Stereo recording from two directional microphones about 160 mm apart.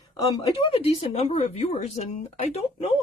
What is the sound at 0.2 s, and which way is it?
Speech, 25° left (ahead or behind).